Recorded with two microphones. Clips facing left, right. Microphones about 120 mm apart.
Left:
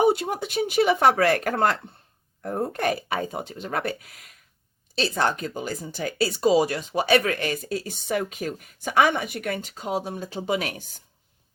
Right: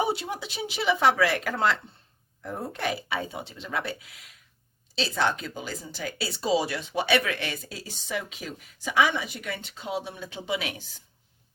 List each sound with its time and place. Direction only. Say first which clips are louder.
0.0 s speech: left 7 dB; 50° left (ahead or behind)